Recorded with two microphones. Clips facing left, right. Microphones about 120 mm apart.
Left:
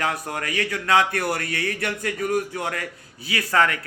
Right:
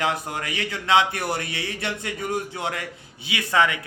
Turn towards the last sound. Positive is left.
turn(degrees=-20)  # may be behind; listen again after turning